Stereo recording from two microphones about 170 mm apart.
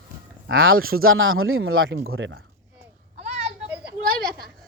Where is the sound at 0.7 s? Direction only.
60° right (ahead or behind).